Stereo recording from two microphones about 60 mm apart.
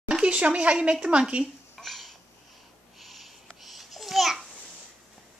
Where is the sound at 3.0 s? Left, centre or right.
Centre.